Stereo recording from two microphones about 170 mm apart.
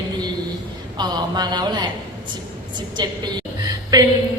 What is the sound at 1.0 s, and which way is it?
Speech, 25° right (ahead or behind).